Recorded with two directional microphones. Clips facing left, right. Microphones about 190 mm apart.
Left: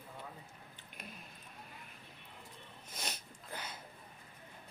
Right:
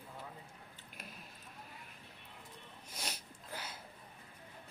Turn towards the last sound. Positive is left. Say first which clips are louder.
# left 1 dB
turn(degrees=-5)  # may be behind; listen again after turning